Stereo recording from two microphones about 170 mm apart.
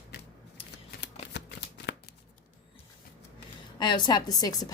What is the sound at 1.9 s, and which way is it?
Shuffling cards, 90° left.